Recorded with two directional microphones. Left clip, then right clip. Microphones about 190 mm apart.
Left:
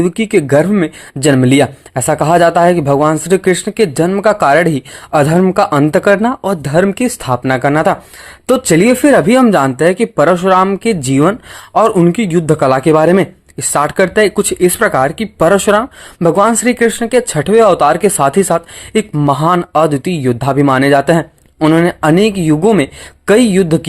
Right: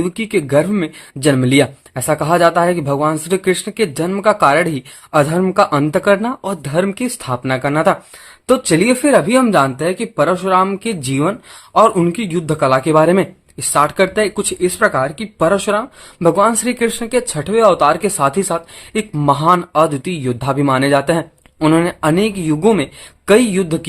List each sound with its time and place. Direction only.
0.0 s speech: 25° left (ahead or behind)